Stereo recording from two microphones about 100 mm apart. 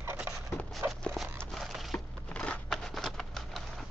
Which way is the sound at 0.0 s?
20° right (ahead or behind).